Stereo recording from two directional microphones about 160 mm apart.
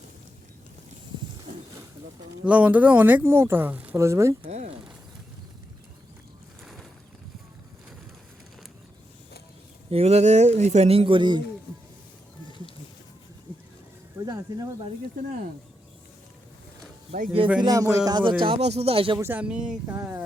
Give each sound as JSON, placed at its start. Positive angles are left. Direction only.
{"t": 2.4, "sound": "speech", "side_deg": -10}
{"t": 4.4, "sound": "a sound", "side_deg": -45}
{"t": 6.6, "sound": "boat", "side_deg": 0}
{"t": 9.9, "sound": "speech", "side_deg": -40}
{"t": 12.5, "sound": "a sound", "side_deg": 30}
{"t": 14.3, "sound": "speech", "side_deg": -20}
{"t": 17.6, "sound": "speech", "side_deg": -25}
{"t": 19.2, "sound": "speech", "side_deg": -10}